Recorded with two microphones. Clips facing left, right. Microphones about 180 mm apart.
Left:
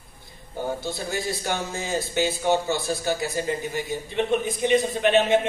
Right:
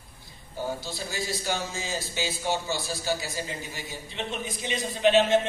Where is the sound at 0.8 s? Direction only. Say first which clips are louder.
Left 5 dB; 55° left (ahead or behind).